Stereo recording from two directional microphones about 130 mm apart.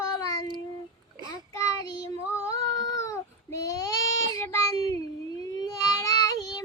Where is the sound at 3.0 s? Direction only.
25° left (ahead or behind).